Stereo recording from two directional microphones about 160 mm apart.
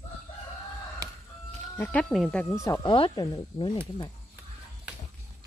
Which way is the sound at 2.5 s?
20° left (ahead or behind).